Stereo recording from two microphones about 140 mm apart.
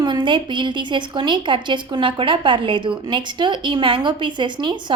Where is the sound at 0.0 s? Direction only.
30° right (ahead or behind).